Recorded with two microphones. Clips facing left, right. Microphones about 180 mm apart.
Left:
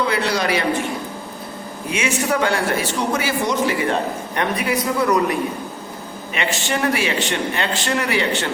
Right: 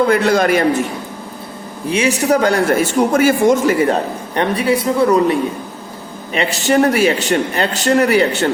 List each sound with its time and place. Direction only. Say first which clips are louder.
0.0 s a man's voice: right 7 dB; 50° right (ahead or behind)
1.9 s a man's voice: right 7 dB; 35° right (ahead or behind)
4.4 s a woman's voice: right 6 dB; 30° right (ahead or behind)